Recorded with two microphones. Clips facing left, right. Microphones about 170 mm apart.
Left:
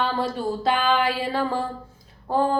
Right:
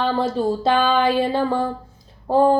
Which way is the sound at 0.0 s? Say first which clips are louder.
Right 5 dB; 25° right (ahead or behind).